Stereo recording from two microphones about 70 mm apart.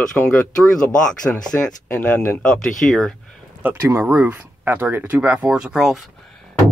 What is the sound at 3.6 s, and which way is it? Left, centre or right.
Speech, right.